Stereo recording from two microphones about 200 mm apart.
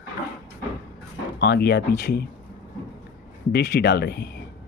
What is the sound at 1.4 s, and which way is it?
Speech, 55° left (ahead or behind).